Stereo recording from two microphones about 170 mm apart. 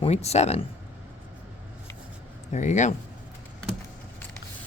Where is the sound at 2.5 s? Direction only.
45° left (ahead or behind).